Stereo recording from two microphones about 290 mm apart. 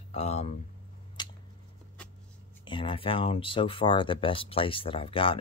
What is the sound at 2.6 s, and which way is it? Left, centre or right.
Speech, centre.